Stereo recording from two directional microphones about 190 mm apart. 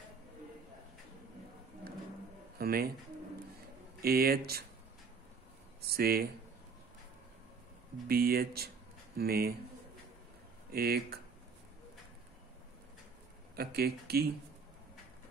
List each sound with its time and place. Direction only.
2.6 s pigeon: 55° right (ahead or behind)
4.0 s speech: 55° right (ahead or behind)
5.9 s speech: 55° right (ahead or behind)
8.1 s speech: 50° right (ahead or behind)
10.7 s speech: 55° right (ahead or behind)
13.6 s speech: 55° right (ahead or behind)